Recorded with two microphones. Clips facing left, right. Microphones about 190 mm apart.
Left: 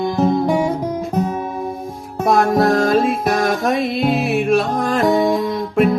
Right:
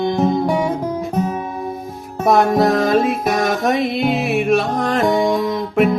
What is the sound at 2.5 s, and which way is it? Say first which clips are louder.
Music: even; centre (ahead or behind).